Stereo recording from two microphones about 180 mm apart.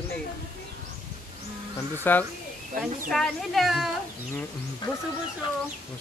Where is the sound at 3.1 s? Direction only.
Centre (ahead or behind).